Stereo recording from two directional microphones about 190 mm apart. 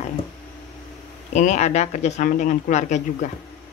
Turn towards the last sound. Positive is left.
turn(degrees=40)  # may be behind; listen again after turning